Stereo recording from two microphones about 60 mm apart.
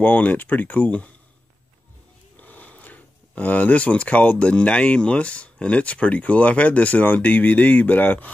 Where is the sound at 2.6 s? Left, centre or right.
Left.